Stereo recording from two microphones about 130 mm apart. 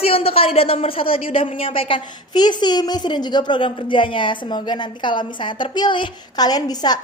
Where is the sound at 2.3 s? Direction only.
35° left (ahead or behind).